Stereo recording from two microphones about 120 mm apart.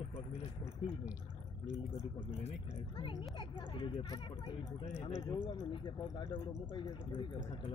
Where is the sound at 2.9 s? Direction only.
40° left (ahead or behind).